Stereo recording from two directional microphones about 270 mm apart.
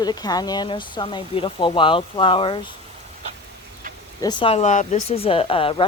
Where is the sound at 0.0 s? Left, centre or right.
Centre.